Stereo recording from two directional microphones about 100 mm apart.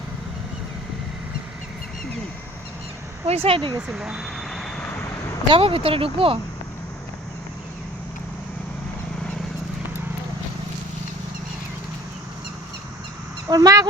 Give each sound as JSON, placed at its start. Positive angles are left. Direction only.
{"t": 3.2, "sound": "speech", "side_deg": -80}
{"t": 3.8, "sound": "vehicle", "side_deg": -5}
{"t": 4.8, "sound": "vehicle", "side_deg": 25}
{"t": 5.5, "sound": "speech", "side_deg": -65}
{"t": 13.5, "sound": "speech", "side_deg": -35}